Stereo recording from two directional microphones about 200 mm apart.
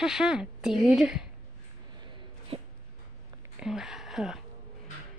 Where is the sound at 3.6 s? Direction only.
Centre (ahead or behind).